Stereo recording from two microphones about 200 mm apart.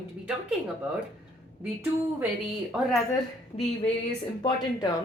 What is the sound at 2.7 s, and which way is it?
Speech, 5° right (ahead or behind).